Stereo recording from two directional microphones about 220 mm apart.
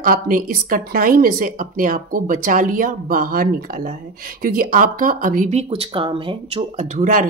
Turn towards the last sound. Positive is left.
turn(degrees=-35)  # may be behind; listen again after turning